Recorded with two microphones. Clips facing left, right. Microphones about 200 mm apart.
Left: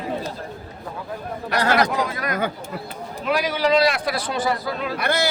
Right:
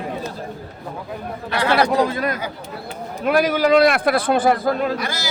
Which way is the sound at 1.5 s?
45° left (ahead or behind).